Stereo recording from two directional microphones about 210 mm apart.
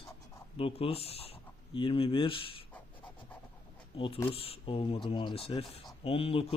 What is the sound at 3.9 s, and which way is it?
Speech, 25° left (ahead or behind).